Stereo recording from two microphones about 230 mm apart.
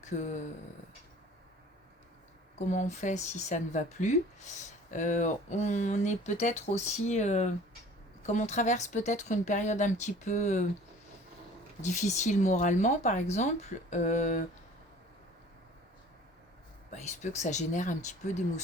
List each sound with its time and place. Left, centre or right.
0.0 s a sound: left
2.6 s speech: left
11.8 s speech: left
16.9 s speech: left